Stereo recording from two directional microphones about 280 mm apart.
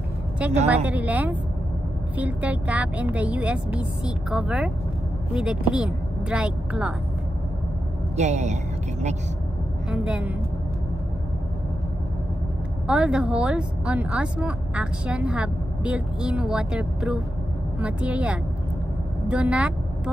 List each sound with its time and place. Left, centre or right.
0.7 s a woman's voice: centre
8.2 s a woman's voice: right
9.8 s a woman's voice: centre
12.8 s a woman's voice: centre